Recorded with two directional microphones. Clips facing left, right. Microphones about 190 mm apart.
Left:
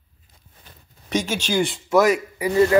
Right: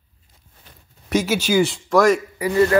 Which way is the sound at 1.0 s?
5° right (ahead or behind).